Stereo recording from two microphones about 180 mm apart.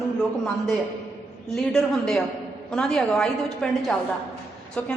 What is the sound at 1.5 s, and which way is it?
A woman's voice, centre (ahead or behind).